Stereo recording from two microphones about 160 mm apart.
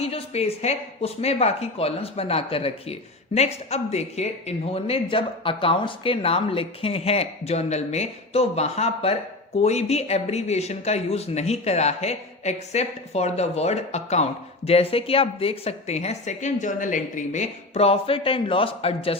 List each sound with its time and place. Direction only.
0.0 s speech: 40° left (ahead or behind)